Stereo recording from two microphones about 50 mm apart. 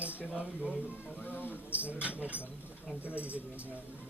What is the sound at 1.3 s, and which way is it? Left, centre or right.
Speech, left.